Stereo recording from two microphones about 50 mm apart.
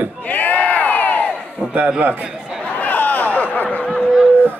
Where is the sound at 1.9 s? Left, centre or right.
Right.